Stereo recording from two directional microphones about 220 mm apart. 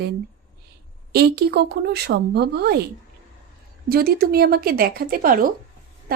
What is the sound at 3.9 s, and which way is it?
Speech, 45° right (ahead or behind).